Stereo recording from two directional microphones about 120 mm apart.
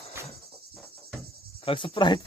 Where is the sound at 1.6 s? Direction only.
45° left (ahead or behind).